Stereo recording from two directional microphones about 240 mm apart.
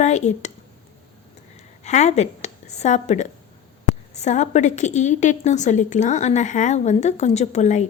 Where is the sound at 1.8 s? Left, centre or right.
Left.